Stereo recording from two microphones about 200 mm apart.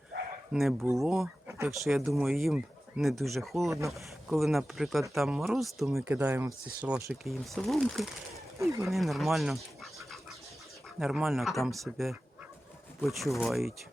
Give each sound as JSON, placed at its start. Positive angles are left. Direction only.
{"t": 0.5, "sound": "speech", "side_deg": 0}
{"t": 1.5, "sound": "a sound", "side_deg": -10}
{"t": 1.7, "sound": "speech", "side_deg": 0}
{"t": 8.5, "sound": "speech", "side_deg": -15}
{"t": 8.9, "sound": "speech", "side_deg": 0}
{"t": 11.0, "sound": "speech", "side_deg": 0}